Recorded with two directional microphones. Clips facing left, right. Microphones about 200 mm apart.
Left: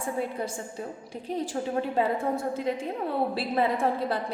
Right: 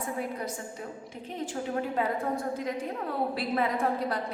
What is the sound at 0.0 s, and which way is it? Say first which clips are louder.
A woman's voice: left 3 dB; 30° left (ahead or behind).